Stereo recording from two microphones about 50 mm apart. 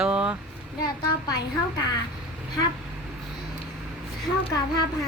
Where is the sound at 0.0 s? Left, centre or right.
Right.